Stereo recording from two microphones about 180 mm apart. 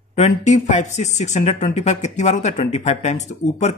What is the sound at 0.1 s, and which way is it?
A man's voice, 40° left (ahead or behind).